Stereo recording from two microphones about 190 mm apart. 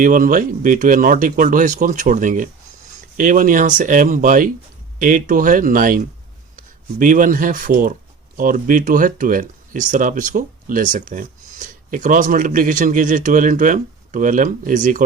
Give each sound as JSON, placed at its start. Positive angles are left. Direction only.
{"t": 0.0, "sound": "speech", "side_deg": -45}